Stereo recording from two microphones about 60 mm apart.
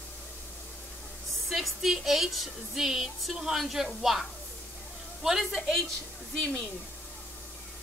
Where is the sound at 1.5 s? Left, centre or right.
Centre.